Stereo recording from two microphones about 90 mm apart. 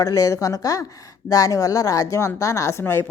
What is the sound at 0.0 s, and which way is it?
Speech, 40° left (ahead or behind).